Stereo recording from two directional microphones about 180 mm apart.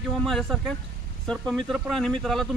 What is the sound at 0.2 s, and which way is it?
Speech, centre (ahead or behind).